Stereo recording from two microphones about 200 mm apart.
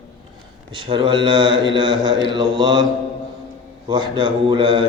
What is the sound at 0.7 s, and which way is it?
Speech, 25° right (ahead or behind).